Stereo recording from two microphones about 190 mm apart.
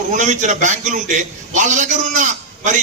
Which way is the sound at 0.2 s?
40° right (ahead or behind).